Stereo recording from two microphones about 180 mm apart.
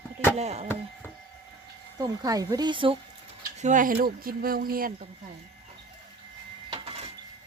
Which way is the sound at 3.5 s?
45° right (ahead or behind).